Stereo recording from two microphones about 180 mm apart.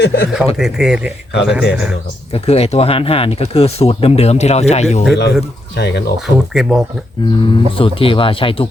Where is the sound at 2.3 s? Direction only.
35° left (ahead or behind).